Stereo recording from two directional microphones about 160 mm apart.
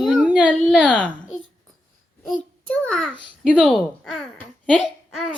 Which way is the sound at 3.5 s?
5° left (ahead or behind).